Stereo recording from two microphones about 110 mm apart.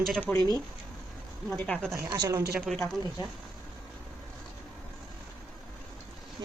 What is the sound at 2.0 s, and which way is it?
Speech, 35° right (ahead or behind).